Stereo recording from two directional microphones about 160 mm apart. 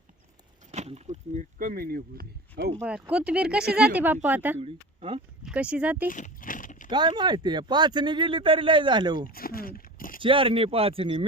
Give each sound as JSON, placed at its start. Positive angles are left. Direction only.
{"t": 0.7, "sound": "speech", "side_deg": -40}
{"t": 2.8, "sound": "speech", "side_deg": -5}
{"t": 4.6, "sound": "speech", "side_deg": -35}
{"t": 5.4, "sound": "speech", "side_deg": -5}
{"t": 6.1, "sound": "a sound", "side_deg": 55}
{"t": 6.9, "sound": "speech", "side_deg": -25}
{"t": 9.3, "sound": "a sound", "side_deg": 65}
{"t": 10.2, "sound": "speech", "side_deg": -35}